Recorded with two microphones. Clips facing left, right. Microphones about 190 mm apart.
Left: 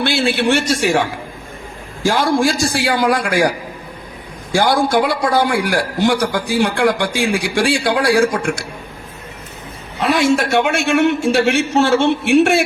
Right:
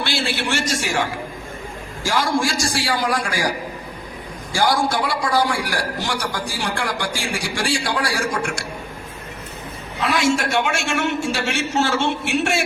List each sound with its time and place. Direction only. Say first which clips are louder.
0.0 s a man's voice: left 8 dB; 55° left (ahead or behind)
2.0 s a man's voice: left 6 dB; 55° left (ahead or behind)
4.5 s a man's voice: left 5 dB; 60° left (ahead or behind)
10.2 s a man's voice: left 4 dB; 55° left (ahead or behind)